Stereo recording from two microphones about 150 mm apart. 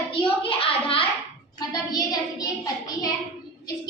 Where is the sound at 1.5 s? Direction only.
25° left (ahead or behind).